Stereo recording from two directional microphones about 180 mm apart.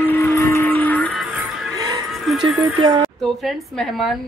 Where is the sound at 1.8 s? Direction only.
20° right (ahead or behind).